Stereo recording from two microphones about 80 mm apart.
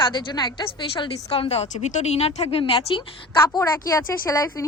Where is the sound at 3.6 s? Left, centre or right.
Left.